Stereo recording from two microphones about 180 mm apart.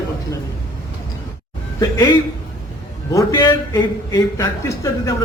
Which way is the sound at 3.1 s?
20° left (ahead or behind).